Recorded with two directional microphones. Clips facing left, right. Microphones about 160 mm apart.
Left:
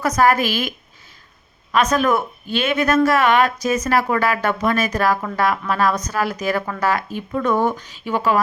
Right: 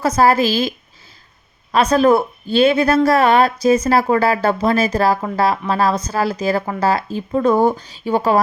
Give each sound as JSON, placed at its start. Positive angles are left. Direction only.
{"t": 0.0, "sound": "speech", "side_deg": -30}
{"t": 1.7, "sound": "speech", "side_deg": -30}